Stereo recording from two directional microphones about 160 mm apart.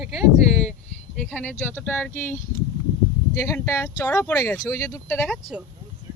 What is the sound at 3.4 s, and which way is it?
Speech, 20° left (ahead or behind).